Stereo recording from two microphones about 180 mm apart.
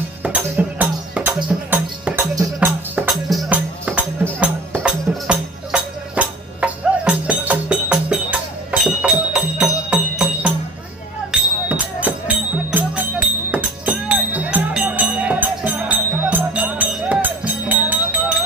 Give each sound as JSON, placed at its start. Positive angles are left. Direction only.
{"t": 0.2, "sound": "music", "side_deg": -10}
{"t": 11.7, "sound": "music", "side_deg": -10}